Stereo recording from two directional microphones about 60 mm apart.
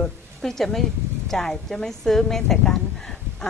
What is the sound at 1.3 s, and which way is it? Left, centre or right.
Speech, centre.